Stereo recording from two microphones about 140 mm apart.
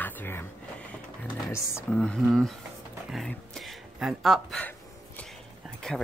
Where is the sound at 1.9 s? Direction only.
5° left (ahead or behind).